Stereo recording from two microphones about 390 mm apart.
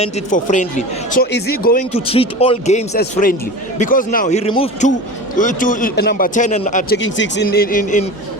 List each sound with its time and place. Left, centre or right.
0.0 s a man's voice: centre